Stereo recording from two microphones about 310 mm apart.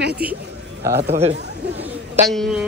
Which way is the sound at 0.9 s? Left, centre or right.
Right.